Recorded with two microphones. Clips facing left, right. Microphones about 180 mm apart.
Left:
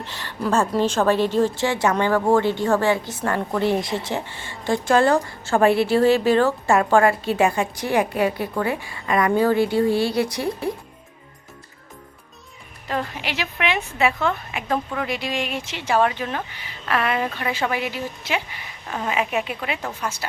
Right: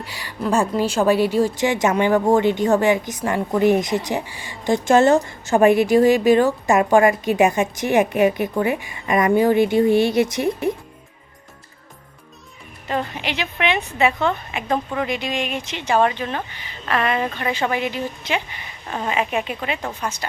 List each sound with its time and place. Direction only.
0.0 s a woman's voice: 10° right (ahead or behind)
12.9 s a woman's voice: centre (ahead or behind)